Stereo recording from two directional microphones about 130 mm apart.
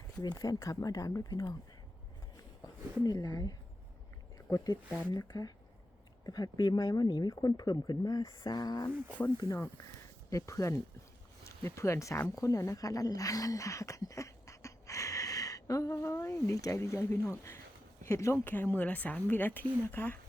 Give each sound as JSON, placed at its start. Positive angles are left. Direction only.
{"t": 0.2, "sound": "speech", "side_deg": 30}
{"t": 3.0, "sound": "speech", "side_deg": 30}
{"t": 4.5, "sound": "speech", "side_deg": 30}
{"t": 9.0, "sound": "speech", "side_deg": 10}
{"t": 9.4, "sound": "speech", "side_deg": 25}